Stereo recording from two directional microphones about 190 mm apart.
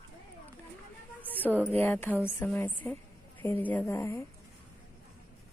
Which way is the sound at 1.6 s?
10° left (ahead or behind).